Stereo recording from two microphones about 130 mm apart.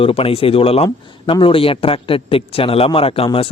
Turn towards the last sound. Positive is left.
turn(degrees=45)  # may be behind; listen again after turning